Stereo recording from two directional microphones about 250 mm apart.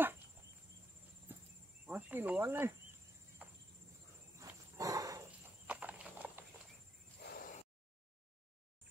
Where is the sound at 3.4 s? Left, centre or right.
Centre.